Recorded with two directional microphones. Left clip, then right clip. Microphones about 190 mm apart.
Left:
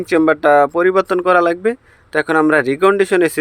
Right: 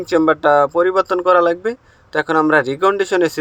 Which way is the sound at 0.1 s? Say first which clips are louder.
Left 1 dB; 50° left (ahead or behind).